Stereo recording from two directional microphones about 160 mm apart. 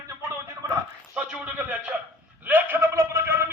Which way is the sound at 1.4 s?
10° right (ahead or behind).